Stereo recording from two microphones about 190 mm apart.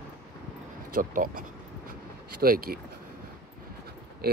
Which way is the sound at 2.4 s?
50° right (ahead or behind).